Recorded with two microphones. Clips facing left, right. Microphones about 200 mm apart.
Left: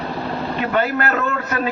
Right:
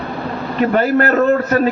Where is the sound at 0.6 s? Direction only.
40° right (ahead or behind).